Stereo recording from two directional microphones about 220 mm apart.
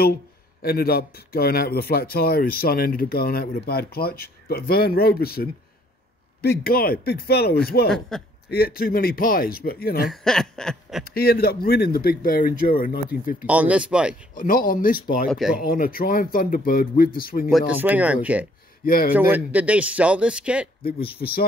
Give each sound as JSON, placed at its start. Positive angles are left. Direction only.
{"t": 0.6, "sound": "speech", "side_deg": 45}
{"t": 10.0, "sound": "speech", "side_deg": 0}
{"t": 11.1, "sound": "speech", "side_deg": 45}
{"t": 13.5, "sound": "speech", "side_deg": -5}
{"t": 14.3, "sound": "speech", "side_deg": 40}
{"t": 15.2, "sound": "speech", "side_deg": 0}
{"t": 15.6, "sound": "speech", "side_deg": 40}
{"t": 17.5, "sound": "speech", "side_deg": -5}
{"t": 18.9, "sound": "speech", "side_deg": 40}
{"t": 19.1, "sound": "speech", "side_deg": -10}
{"t": 21.2, "sound": "speech", "side_deg": 45}